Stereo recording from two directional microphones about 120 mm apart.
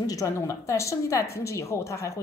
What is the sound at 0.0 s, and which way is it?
A woman's voice, 30° left (ahead or behind).